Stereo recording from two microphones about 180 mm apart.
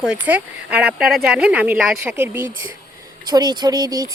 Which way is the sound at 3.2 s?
20° right (ahead or behind).